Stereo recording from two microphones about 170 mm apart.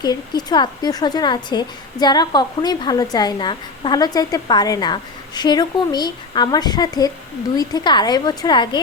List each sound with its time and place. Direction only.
0.0 s a woman's voice: 25° left (ahead or behind)